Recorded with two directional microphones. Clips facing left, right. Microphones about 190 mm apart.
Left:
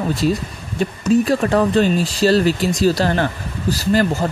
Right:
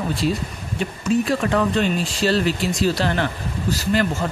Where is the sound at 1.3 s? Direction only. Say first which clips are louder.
Left 4 dB; 40° left (ahead or behind).